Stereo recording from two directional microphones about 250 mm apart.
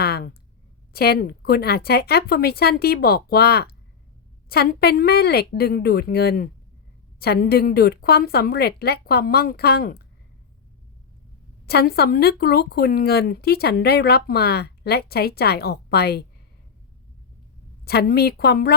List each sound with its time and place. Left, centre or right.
0.0 s a sound: left
0.9 s speech: left
11.6 s speech: left
17.8 s speech: left